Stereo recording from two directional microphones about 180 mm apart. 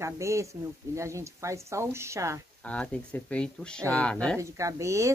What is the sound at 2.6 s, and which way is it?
Speech, 5° left (ahead or behind).